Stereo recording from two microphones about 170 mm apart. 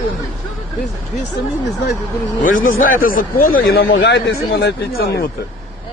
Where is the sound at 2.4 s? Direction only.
55° left (ahead or behind).